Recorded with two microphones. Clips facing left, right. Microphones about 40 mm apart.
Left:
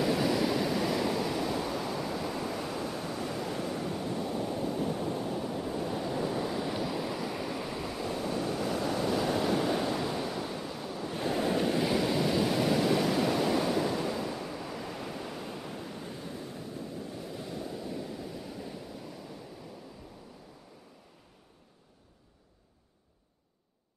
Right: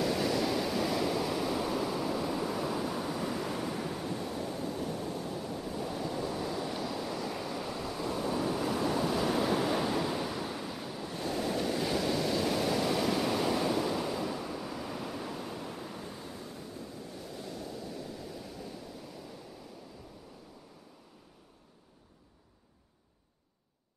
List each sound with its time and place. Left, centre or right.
0.0 s waves: centre
4.4 s waves: centre
4.8 s a sound: left
5.5 s waves: left
5.8 s waves: centre
11.1 s waves: left
11.8 s waves: centre